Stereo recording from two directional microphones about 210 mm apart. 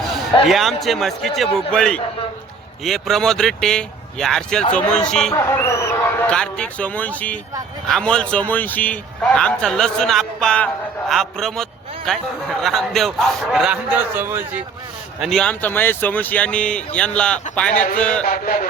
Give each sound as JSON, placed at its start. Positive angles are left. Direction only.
{"t": 0.4, "sound": "a man's voice", "side_deg": 0}
{"t": 15.2, "sound": "a man's voice", "side_deg": 0}
{"t": 18.3, "sound": "mantra", "side_deg": 40}